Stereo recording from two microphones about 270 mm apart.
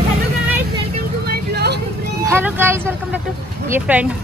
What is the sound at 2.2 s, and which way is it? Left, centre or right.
Speech, centre.